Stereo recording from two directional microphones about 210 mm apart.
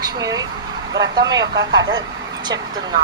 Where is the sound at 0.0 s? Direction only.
15° right (ahead or behind).